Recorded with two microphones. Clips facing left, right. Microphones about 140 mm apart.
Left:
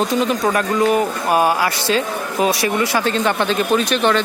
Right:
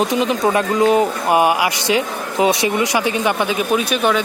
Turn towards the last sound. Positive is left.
turn(degrees=-10)  # may be behind; listen again after turning